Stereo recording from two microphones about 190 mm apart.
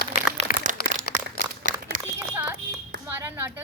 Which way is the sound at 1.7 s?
45° right (ahead or behind).